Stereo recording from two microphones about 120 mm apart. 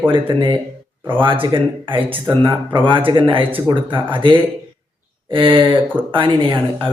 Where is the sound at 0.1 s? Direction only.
40° right (ahead or behind).